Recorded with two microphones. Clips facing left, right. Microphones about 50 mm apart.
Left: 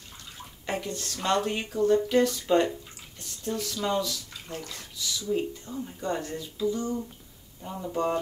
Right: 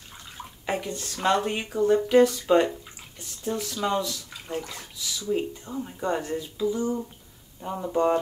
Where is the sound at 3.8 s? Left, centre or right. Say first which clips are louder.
Right 1 dB; centre.